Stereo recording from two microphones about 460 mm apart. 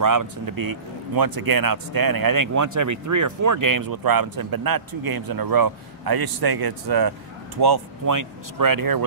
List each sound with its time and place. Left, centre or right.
0.0 s speech: right